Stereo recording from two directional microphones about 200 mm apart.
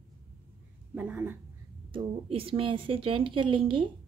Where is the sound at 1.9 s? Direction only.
30° right (ahead or behind).